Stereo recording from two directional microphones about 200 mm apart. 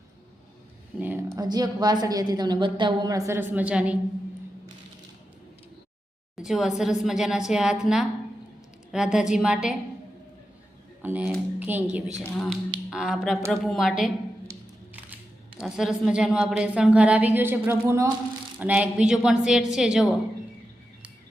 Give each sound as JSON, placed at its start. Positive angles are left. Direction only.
{"t": 0.9, "sound": "speech", "side_deg": -10}
{"t": 1.4, "sound": "a woman's voice", "side_deg": -20}
{"t": 6.4, "sound": "a woman's voice", "side_deg": 0}
{"t": 11.0, "sound": "speech", "side_deg": -10}
{"t": 12.2, "sound": "a woman's voice", "side_deg": 5}